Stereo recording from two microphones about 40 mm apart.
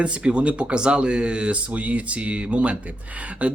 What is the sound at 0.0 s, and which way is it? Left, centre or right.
Speech, right.